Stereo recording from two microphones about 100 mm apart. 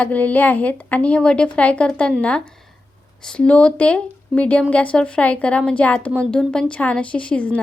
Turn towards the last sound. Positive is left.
turn(degrees=15)  # may be behind; listen again after turning